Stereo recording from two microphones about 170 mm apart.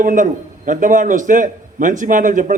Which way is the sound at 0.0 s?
50° right (ahead or behind).